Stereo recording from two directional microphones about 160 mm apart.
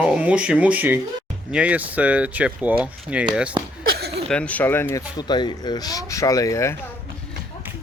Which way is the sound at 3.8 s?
90° right.